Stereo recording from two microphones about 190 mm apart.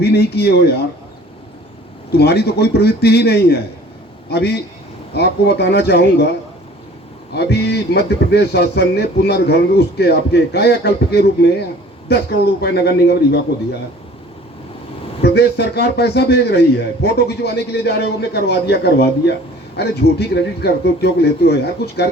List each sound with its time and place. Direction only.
0.0 s a man's voice: 60° left (ahead or behind)
2.1 s a man's voice: 60° left (ahead or behind)
7.3 s a man's voice: 60° left (ahead or behind)
15.2 s a man's voice: 60° left (ahead or behind)